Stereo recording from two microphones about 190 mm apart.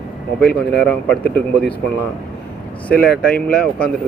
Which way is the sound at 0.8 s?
10° left (ahead or behind).